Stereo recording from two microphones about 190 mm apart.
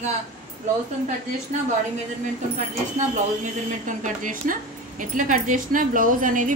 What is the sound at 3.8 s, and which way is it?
Speech, 40° right (ahead or behind).